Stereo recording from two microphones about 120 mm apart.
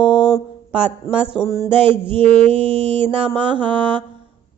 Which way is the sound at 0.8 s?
50° right (ahead or behind).